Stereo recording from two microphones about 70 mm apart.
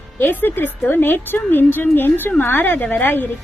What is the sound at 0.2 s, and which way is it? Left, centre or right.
A woman's voice, left.